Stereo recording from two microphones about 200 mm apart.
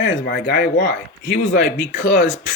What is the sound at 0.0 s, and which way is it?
Speech, 55° left (ahead or behind).